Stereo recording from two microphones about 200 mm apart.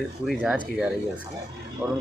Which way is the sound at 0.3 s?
Centre (ahead or behind).